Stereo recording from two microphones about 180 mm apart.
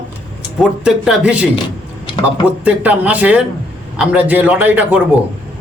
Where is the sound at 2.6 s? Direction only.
5° right (ahead or behind).